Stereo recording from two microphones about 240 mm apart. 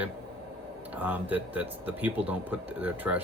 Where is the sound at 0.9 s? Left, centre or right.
Centre.